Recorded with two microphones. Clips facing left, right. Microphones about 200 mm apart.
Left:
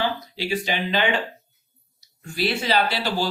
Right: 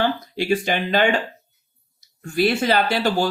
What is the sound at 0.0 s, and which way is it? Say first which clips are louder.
Speech: right 4 dB; 50° right (ahead or behind).